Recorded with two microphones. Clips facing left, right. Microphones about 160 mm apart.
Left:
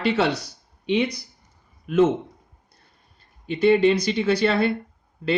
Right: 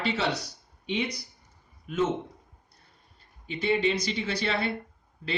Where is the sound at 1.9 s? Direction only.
75° left (ahead or behind).